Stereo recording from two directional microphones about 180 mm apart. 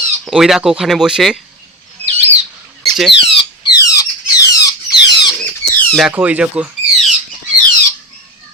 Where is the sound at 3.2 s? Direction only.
30° left (ahead or behind).